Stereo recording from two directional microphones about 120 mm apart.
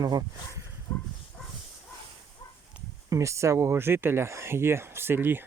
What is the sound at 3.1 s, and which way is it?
Speech, 25° right (ahead or behind).